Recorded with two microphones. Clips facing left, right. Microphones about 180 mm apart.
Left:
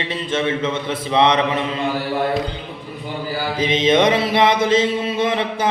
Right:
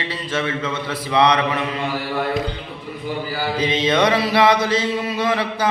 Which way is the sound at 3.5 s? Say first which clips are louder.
Left 3 dB; 20° left (ahead or behind).